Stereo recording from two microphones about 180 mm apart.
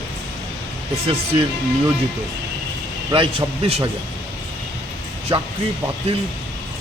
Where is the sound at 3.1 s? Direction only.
30° right (ahead or behind).